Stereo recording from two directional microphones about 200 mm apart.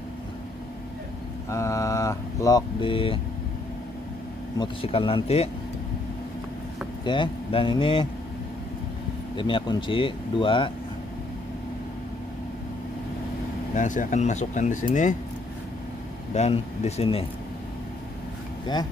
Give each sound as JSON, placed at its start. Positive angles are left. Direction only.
{"t": 1.5, "sound": "speech", "side_deg": 15}
{"t": 4.6, "sound": "speech", "side_deg": 30}
{"t": 7.1, "sound": "speech", "side_deg": 25}
{"t": 9.4, "sound": "speech", "side_deg": 25}
{"t": 13.7, "sound": "speech", "side_deg": 40}
{"t": 16.3, "sound": "speech", "side_deg": 35}